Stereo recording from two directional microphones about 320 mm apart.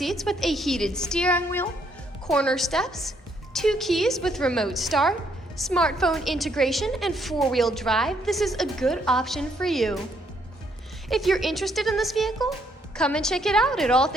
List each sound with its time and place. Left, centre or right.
0.0 s a woman's voice: centre
11.1 s a woman's voice: centre